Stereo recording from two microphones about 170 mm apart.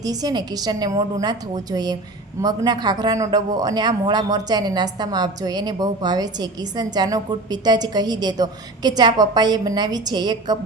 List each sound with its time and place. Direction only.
0.0 s speech: 20° right (ahead or behind)